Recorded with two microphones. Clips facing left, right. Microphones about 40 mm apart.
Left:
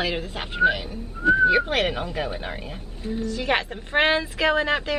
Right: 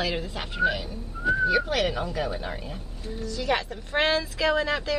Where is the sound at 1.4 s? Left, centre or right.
Left.